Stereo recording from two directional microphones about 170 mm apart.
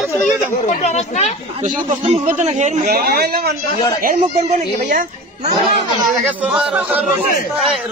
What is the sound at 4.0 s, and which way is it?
Speech, 55° right (ahead or behind).